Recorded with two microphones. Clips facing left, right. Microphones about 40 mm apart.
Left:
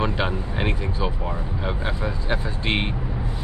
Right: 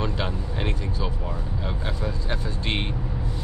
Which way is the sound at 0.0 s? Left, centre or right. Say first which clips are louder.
Left 4 dB; left.